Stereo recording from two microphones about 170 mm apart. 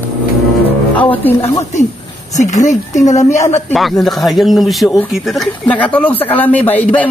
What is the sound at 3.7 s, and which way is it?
A man's voice, centre (ahead or behind).